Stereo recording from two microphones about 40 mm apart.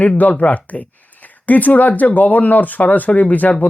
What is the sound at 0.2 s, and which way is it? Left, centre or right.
Speech, left.